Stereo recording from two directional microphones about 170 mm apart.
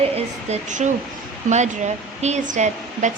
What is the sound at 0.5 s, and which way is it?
A woman's voice, 45° right (ahead or behind).